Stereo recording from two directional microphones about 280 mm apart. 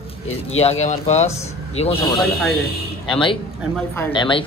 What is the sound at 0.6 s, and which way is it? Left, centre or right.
Speech, left.